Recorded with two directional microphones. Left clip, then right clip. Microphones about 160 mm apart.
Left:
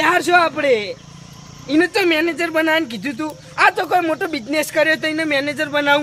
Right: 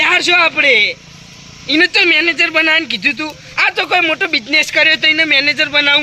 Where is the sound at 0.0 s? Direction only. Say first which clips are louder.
Right 3 dB; 5° left (ahead or behind).